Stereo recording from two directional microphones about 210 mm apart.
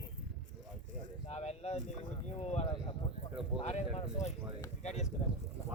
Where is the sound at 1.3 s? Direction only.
30° left (ahead or behind).